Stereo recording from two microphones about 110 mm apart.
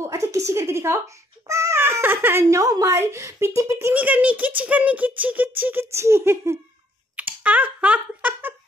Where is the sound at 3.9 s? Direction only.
15° right (ahead or behind).